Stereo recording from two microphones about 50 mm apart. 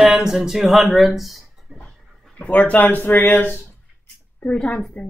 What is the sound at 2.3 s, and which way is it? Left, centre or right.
Speech, left.